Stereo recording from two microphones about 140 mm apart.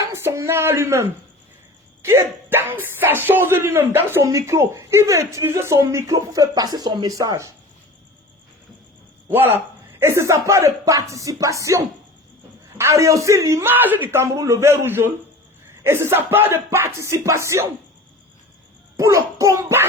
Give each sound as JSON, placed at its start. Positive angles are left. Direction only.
{"t": 0.0, "sound": "a sound", "side_deg": -20}
{"t": 2.0, "sound": "speech", "side_deg": -20}
{"t": 9.3, "sound": "speech", "side_deg": -15}
{"t": 18.9, "sound": "child singing", "side_deg": -20}